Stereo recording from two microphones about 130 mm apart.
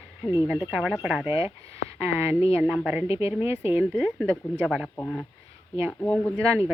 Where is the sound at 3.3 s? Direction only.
20° right (ahead or behind).